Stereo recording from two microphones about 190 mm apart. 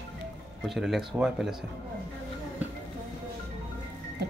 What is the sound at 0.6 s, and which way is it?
Speech, centre (ahead or behind).